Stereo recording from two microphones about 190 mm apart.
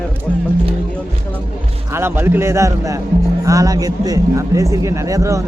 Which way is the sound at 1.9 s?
10° right (ahead or behind).